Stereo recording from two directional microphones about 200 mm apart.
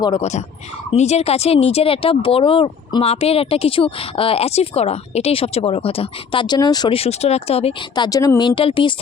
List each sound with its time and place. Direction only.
0.0 s speech: 30° left (ahead or behind)